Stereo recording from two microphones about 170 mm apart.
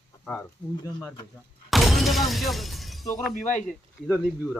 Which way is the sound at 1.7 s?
Centre (ahead or behind).